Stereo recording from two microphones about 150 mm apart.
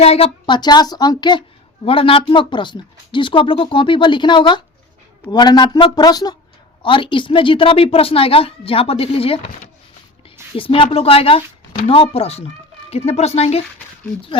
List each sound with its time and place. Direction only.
0.0 s a man's voice: 40° left (ahead or behind)
10.6 s speech: 40° left (ahead or behind)